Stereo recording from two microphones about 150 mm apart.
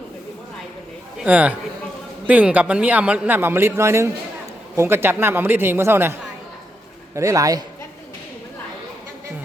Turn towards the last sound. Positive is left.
turn(degrees=-25)  # may be behind; listen again after turning